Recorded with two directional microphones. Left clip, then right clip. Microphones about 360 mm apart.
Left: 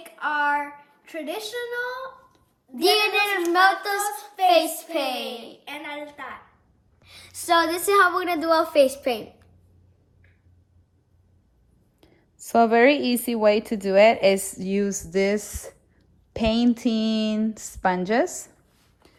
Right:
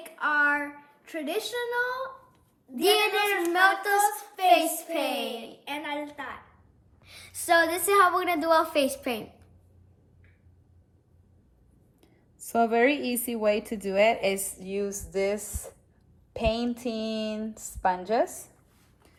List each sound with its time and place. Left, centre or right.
0.0 s a sound: centre
3.4 s a woman's voice: centre
11.9 s a woman's voice: left